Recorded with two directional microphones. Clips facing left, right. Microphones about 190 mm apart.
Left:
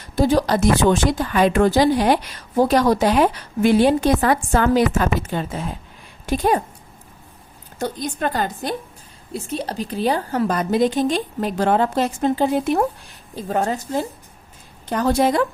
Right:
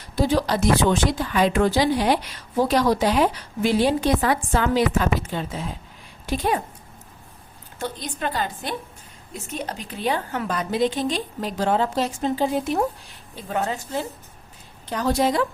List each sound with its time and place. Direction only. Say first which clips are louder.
0.2 s a woman's voice: left 4 dB; 45° left (ahead or behind)
7.8 s a woman's voice: left 5 dB; 45° left (ahead or behind)
9.3 s a woman's voice: left 5 dB; 35° left (ahead or behind); by 12.8 s 60° left (ahead or behind)
13.3 s a woman's voice: left 4 dB; 40° left (ahead or behind)
14.8 s a woman's voice: left 3 dB; 50° left (ahead or behind)